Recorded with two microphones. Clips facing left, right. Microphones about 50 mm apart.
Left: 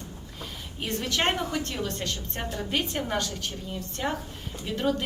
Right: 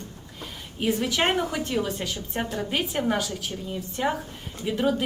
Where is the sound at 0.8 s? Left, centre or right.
Centre.